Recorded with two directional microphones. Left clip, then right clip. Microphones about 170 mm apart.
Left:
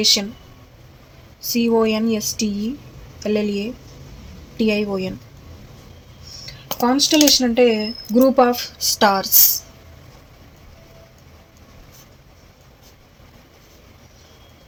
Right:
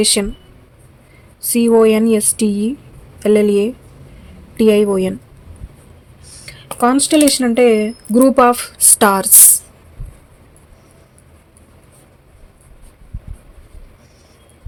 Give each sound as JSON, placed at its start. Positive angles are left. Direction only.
{"t": 0.0, "sound": "speech", "side_deg": -80}
{"t": 1.5, "sound": "speech", "side_deg": -80}
{"t": 6.8, "sound": "speech", "side_deg": -85}